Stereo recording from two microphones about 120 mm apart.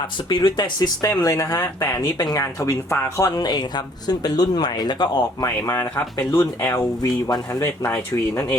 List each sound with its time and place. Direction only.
0.3 s speech: 40° left (ahead or behind)
5.5 s speech: 25° left (ahead or behind)